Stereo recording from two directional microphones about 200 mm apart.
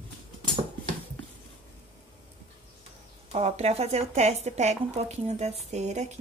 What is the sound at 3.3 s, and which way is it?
A woman's voice, 30° right (ahead or behind).